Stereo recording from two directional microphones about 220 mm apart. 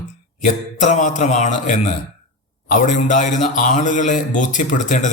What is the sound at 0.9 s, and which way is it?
Speech, 35° left (ahead or behind).